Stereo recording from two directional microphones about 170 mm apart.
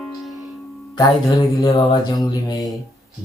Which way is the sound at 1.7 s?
35° left (ahead or behind).